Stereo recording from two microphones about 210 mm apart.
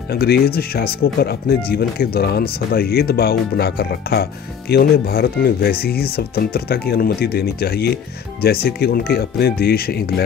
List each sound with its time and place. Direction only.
0.1 s speech: 50° left (ahead or behind)